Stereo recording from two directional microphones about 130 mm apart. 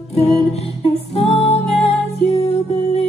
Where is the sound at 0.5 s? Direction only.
55° left (ahead or behind).